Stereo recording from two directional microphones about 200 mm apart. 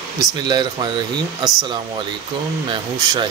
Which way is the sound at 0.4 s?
20° right (ahead or behind).